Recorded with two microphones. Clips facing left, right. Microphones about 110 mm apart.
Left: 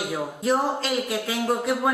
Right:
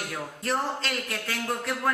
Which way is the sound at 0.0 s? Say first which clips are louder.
Left 7 dB; 5° left (ahead or behind).